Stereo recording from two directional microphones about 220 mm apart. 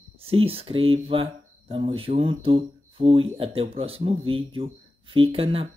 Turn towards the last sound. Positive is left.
turn(degrees=-25)  # may be behind; listen again after turning